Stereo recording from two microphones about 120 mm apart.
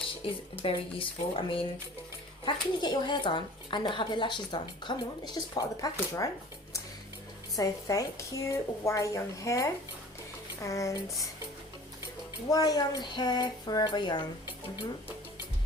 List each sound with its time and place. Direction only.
0.2 s speech: 50° left (ahead or behind); by 6.3 s 30° left (ahead or behind)
7.5 s speech: 30° left (ahead or behind)
12.5 s speech: 30° left (ahead or behind)